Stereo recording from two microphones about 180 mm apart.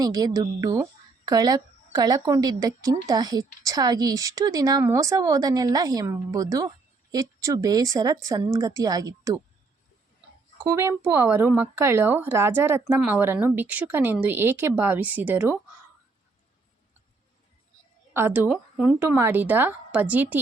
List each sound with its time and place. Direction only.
0.0 s a woman's voice: 20° right (ahead or behind)
10.7 s speech: 15° right (ahead or behind)
18.1 s speech: 15° right (ahead or behind)